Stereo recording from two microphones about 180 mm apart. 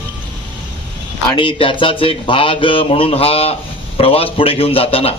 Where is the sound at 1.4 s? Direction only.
30° left (ahead or behind).